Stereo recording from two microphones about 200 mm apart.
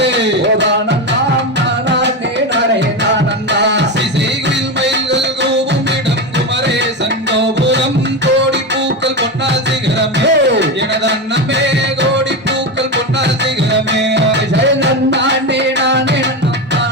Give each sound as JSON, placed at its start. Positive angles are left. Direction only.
{"t": 0.0, "sound": "music", "side_deg": -60}
{"t": 3.6, "sound": "music", "side_deg": -60}
{"t": 7.3, "sound": "music", "side_deg": -60}
{"t": 10.0, "sound": "music", "side_deg": -60}
{"t": 13.9, "sound": "music", "side_deg": -60}